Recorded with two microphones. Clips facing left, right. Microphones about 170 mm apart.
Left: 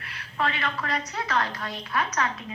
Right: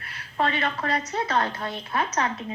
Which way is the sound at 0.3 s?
30° right (ahead or behind).